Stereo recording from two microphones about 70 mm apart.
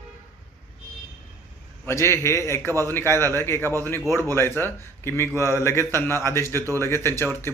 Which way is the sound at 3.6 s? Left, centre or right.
Right.